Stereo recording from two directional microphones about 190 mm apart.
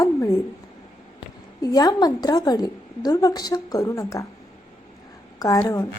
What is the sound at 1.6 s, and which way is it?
A woman's voice, 20° left (ahead or behind).